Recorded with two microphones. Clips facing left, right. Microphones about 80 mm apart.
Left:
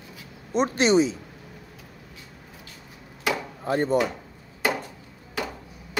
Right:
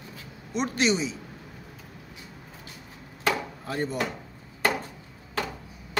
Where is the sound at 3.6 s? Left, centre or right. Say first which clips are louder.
Left 10 dB; left.